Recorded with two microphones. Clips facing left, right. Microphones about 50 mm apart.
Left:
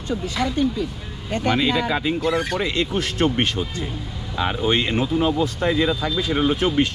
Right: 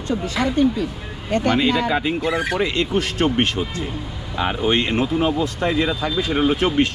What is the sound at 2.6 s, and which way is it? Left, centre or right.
Speech, right.